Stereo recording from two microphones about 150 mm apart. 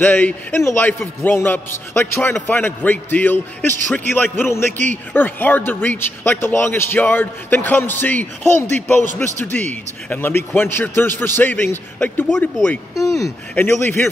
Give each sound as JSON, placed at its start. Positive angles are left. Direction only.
{"t": 0.0, "sound": "a man's voice", "side_deg": 10}
{"t": 12.9, "sound": "a man's voice", "side_deg": 20}